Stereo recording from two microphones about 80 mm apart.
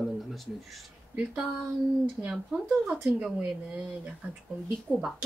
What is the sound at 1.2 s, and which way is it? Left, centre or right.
A woman's voice, centre.